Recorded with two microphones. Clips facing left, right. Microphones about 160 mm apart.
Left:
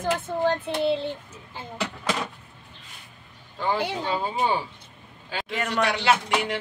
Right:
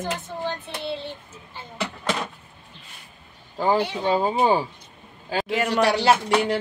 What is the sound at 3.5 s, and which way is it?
Speech, 40° right (ahead or behind).